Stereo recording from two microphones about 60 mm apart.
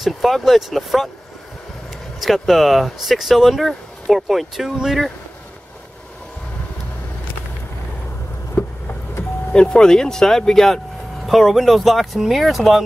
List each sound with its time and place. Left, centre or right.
0.0 s speech: centre
2.2 s speech: centre
8.6 s a sound: left
9.5 s speech: centre